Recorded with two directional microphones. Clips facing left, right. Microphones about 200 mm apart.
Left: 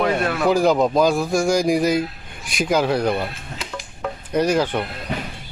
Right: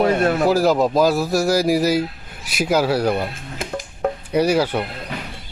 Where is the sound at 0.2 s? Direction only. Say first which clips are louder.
Right 4 dB; 35° right (ahead or behind).